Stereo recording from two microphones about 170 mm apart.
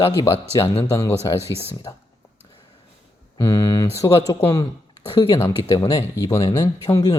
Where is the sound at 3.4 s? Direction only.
20° left (ahead or behind).